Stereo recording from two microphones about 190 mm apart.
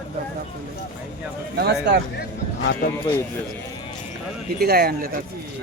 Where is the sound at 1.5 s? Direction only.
60° right (ahead or behind).